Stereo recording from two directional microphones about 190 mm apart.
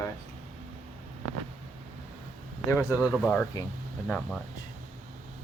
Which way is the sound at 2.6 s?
15° left (ahead or behind).